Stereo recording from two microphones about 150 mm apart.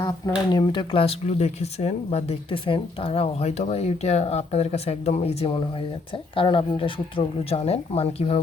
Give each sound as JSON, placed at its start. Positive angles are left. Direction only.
{"t": 0.0, "sound": "speech", "side_deg": 25}